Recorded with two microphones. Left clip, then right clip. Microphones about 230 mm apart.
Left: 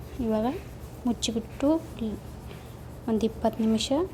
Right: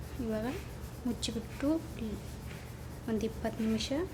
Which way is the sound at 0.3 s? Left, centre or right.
Centre.